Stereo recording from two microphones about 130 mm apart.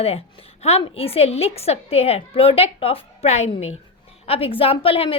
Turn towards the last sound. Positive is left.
turn(degrees=45)  # may be behind; listen again after turning